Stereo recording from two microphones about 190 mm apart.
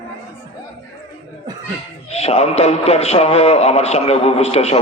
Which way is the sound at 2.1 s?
35° left (ahead or behind).